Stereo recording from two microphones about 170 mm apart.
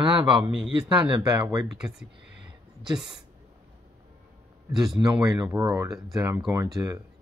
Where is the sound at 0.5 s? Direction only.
5° right (ahead or behind).